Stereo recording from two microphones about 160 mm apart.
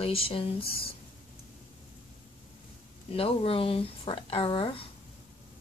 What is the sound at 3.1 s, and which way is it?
Speech, 35° left (ahead or behind).